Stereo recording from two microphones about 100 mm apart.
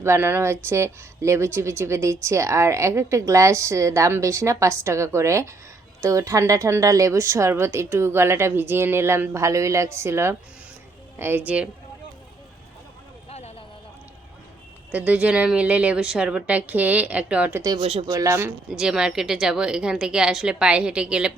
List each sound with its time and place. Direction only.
0.0 s a woman's voice: 25° right (ahead or behind)
13.3 s a sound: 90° left
14.9 s a woman's voice: 15° right (ahead or behind)
17.5 s speech: 35° right (ahead or behind)
17.7 s speech: 70° right (ahead or behind)
18.0 s speech: 35° right (ahead or behind)
18.7 s a woman's voice: 5° right (ahead or behind)